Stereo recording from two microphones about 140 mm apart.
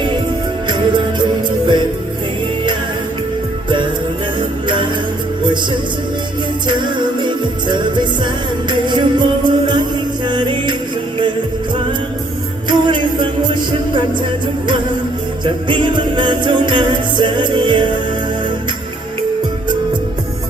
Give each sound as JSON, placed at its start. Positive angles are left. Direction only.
{"t": 0.7, "sound": "music", "side_deg": -35}
{"t": 4.4, "sound": "music", "side_deg": -35}
{"t": 6.7, "sound": "music", "side_deg": -35}
{"t": 12.6, "sound": "music", "side_deg": -35}
{"t": 15.6, "sound": "music", "side_deg": -35}